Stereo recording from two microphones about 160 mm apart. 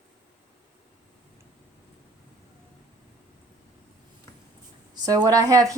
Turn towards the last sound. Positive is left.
turn(degrees=-20)  # may be behind; listen again after turning